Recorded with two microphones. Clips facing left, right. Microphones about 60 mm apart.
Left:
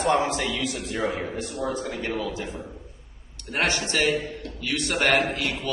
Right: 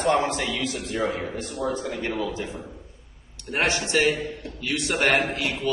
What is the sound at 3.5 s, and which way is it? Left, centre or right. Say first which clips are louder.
Speech: right 2 dB; centre.